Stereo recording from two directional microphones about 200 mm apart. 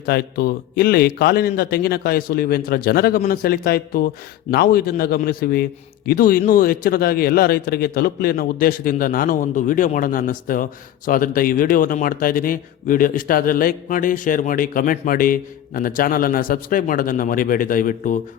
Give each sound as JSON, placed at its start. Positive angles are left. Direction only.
{"t": 0.0, "sound": "speech", "side_deg": 50}